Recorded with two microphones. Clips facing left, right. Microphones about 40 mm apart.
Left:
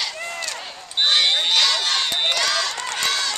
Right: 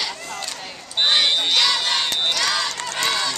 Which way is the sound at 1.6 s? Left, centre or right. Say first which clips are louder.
Even; centre.